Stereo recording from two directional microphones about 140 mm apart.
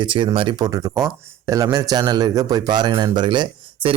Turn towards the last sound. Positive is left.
turn(degrees=-35)  # may be behind; listen again after turning